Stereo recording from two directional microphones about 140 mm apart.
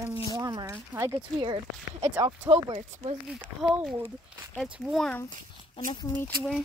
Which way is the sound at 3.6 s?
5° right (ahead or behind).